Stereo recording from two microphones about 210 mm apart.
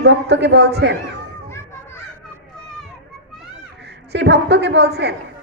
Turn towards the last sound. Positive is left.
turn(degrees=-50)  # may be behind; listen again after turning